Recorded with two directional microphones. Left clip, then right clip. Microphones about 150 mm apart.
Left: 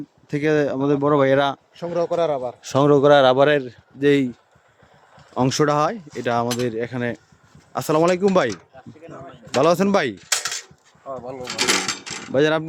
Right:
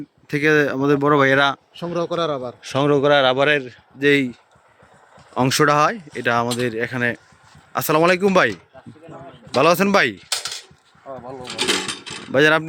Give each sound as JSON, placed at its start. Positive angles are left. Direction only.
{"t": 0.3, "sound": "speech", "side_deg": 15}
{"t": 1.7, "sound": "speech", "side_deg": -90}
{"t": 2.6, "sound": "speech", "side_deg": 35}
{"t": 5.3, "sound": "speech", "side_deg": 10}
{"t": 9.6, "sound": "speech", "side_deg": 10}
{"t": 10.3, "sound": "a sound", "side_deg": -10}
{"t": 11.0, "sound": "a sound", "side_deg": 5}
{"t": 11.9, "sound": "mechanisms", "side_deg": 50}
{"t": 12.3, "sound": "speech", "side_deg": 0}